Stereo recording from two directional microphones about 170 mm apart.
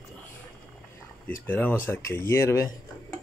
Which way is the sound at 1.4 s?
10° left (ahead or behind).